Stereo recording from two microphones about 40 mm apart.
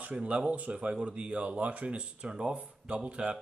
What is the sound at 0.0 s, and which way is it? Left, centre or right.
Speech, right.